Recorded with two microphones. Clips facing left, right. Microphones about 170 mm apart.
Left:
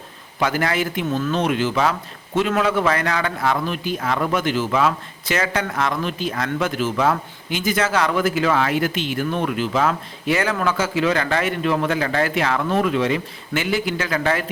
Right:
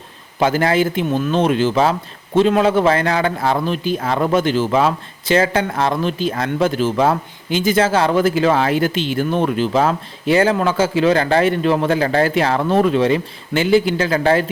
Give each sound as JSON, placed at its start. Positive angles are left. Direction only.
{"t": 0.3, "sound": "a man's voice", "side_deg": -30}